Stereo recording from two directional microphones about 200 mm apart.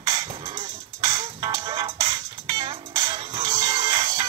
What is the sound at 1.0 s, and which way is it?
Music, 20° right (ahead or behind).